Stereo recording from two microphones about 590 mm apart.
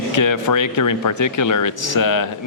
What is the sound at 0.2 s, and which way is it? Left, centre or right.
A man's voice, left.